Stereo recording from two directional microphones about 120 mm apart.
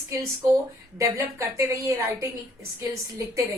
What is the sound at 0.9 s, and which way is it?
A woman's voice, 25° right (ahead or behind).